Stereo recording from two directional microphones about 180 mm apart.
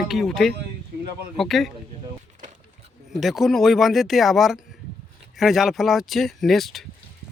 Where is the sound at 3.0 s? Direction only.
Centre (ahead or behind).